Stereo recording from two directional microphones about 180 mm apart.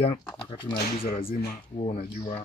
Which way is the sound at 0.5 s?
25° left (ahead or behind).